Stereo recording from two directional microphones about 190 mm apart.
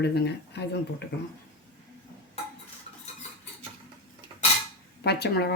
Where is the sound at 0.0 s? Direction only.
60° left (ahead or behind).